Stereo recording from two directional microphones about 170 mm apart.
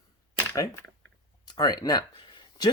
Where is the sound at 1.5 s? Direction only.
20° left (ahead or behind).